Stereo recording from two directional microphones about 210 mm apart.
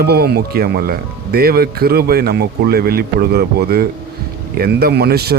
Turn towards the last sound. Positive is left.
turn(degrees=-50)  # may be behind; listen again after turning